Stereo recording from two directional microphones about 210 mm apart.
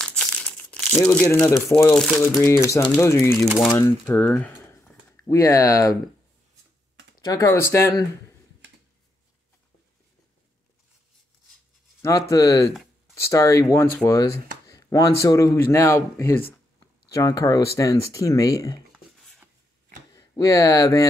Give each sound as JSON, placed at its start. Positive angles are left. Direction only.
{"t": 0.0, "sound": "crumpling", "side_deg": 5}
{"t": 2.0, "sound": "speech", "side_deg": 5}
{"t": 2.3, "sound": "speech", "side_deg": 15}
{"t": 3.4, "sound": "speech", "side_deg": 0}
{"t": 7.2, "sound": "speech", "side_deg": 15}
{"t": 12.0, "sound": "speech", "side_deg": 15}
{"t": 18.9, "sound": "a sound", "side_deg": 0}
{"t": 20.1, "sound": "speech", "side_deg": 15}